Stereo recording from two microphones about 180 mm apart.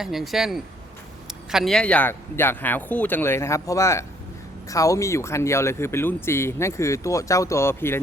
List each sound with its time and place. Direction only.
0.0 s a man's voice: centre (ahead or behind)